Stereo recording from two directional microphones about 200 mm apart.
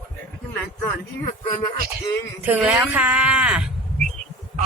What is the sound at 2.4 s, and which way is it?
Speech, 10° right (ahead or behind).